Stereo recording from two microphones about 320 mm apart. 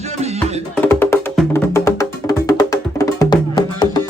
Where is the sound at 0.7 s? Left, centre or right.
Centre.